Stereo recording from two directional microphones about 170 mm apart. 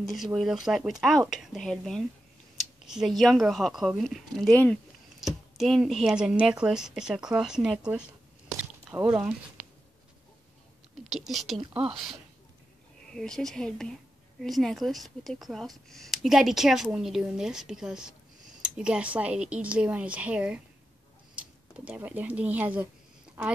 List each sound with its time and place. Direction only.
0.0 s speech: centre (ahead or behind)
8.5 s biting: 10° right (ahead or behind)
11.1 s speech: centre (ahead or behind)